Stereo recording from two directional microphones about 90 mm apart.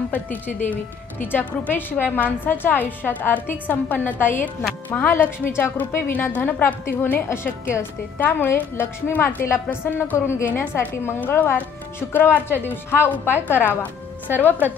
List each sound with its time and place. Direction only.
0.1 s a woman's voice: 20° left (ahead or behind)